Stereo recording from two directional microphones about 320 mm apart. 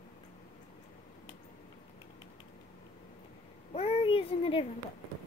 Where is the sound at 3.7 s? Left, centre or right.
Centre.